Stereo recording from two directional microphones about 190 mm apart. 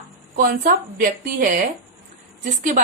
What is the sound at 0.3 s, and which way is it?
A woman's voice, 50° right (ahead or behind).